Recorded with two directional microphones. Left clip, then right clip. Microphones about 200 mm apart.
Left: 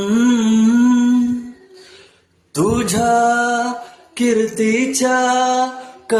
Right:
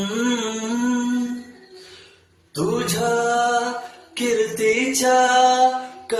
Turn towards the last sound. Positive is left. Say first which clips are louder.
# right 4 dB
turn(degrees=50)  # may be behind; listen again after turning